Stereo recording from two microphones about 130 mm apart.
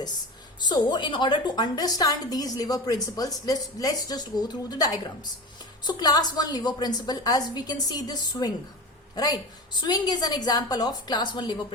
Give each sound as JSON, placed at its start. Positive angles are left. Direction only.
{"t": 0.7, "sound": "a woman's voice", "side_deg": 35}